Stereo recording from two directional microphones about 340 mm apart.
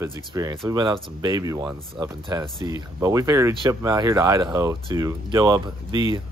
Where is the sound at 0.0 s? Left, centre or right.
Centre.